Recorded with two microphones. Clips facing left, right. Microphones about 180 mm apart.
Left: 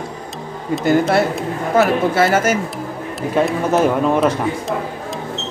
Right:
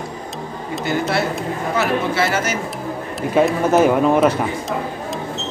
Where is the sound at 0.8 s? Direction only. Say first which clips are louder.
Left 5 dB; 50° left (ahead or behind).